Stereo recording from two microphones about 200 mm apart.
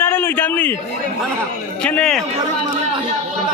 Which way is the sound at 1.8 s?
5° left (ahead or behind).